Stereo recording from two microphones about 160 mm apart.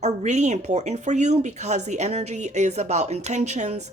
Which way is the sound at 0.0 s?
45° right (ahead or behind).